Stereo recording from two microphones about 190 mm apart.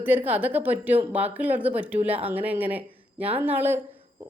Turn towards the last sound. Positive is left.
turn(degrees=-10)  # may be behind; listen again after turning